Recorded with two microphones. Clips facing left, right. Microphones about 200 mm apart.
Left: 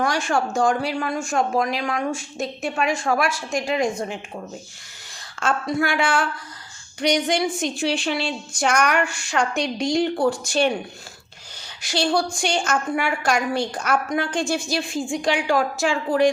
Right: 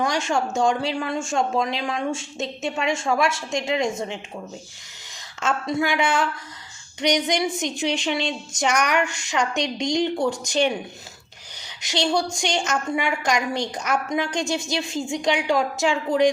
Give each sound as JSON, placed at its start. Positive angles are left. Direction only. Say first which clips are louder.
{"t": 0.0, "sound": "speech", "louder": "left 1 dB", "side_deg": -20}
{"t": 5.4, "sound": "speech", "louder": "left 1 dB", "side_deg": -20}
{"t": 11.8, "sound": "speech", "louder": "left 1 dB", "side_deg": -20}